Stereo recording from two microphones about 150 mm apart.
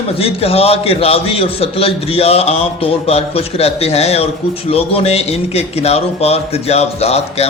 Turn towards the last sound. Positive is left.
turn(degrees=45)  # may be behind; listen again after turning